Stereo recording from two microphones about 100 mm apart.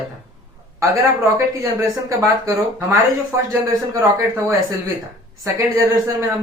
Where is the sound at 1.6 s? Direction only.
35° right (ahead or behind).